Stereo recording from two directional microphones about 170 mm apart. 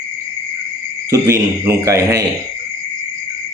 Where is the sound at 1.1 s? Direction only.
15° right (ahead or behind).